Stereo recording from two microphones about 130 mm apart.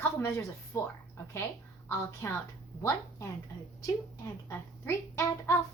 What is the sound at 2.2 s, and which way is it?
Speech, 20° left (ahead or behind).